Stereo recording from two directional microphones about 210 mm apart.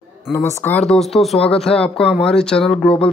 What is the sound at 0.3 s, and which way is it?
Speech, 10° left (ahead or behind).